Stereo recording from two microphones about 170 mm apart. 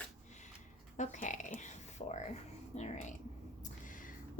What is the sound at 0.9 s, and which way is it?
A woman's voice, 45° left (ahead or behind).